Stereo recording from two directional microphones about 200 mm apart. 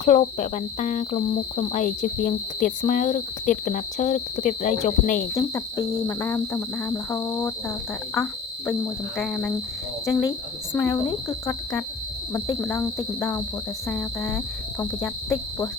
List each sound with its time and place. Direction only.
0.0 s speech: 40° left (ahead or behind)
5.3 s speech: 15° left (ahead or behind)
10.8 s speech: 10° left (ahead or behind)
12.3 s speech: 10° left (ahead or behind)